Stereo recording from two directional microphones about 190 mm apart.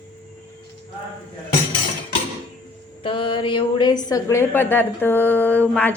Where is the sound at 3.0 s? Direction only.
25° left (ahead or behind).